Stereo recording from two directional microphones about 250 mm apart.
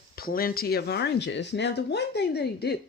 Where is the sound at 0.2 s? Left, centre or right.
Left.